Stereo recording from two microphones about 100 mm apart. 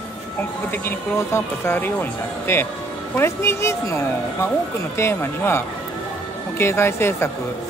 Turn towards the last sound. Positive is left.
turn(degrees=25)  # may be behind; listen again after turning